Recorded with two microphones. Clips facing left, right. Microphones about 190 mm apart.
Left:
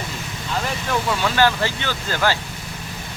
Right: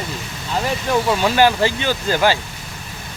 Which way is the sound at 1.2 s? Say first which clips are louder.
Right 3 dB; 15° right (ahead or behind).